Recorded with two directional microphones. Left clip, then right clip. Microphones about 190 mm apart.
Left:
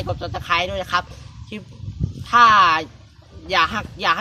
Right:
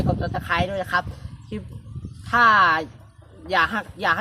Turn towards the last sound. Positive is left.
turn(degrees=0)  # may be behind; listen again after turning